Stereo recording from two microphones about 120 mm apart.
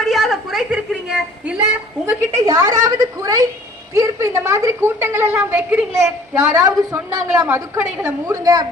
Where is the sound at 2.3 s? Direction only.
25° right (ahead or behind).